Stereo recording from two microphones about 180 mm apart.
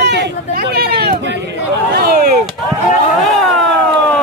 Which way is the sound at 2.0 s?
60° right (ahead or behind).